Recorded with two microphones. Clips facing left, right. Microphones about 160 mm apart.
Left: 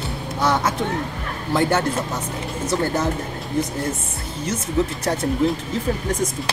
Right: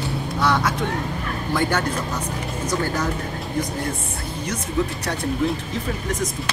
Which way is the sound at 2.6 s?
25° left (ahead or behind).